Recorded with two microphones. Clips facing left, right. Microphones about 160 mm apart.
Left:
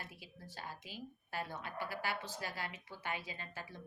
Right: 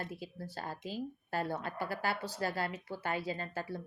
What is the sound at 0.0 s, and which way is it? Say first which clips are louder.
A woman's voice: right 10 dB; 40° right (ahead or behind).